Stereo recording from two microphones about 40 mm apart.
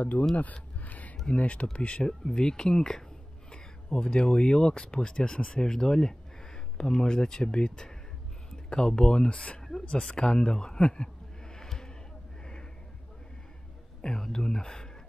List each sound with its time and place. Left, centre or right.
0.0 s speech: left
0.4 s a sound: left
1.2 s speech: left
9.6 s a sound: centre
9.8 s speech: left
14.0 s speech: centre